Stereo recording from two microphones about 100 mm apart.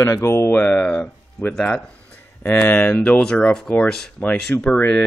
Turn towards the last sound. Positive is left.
turn(degrees=15)  # may be behind; listen again after turning